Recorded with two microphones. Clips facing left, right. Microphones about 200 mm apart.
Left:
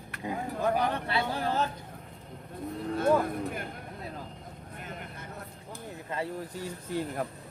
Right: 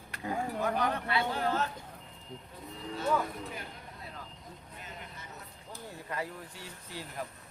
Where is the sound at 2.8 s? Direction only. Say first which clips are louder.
Left 6 dB; 55° left (ahead or behind).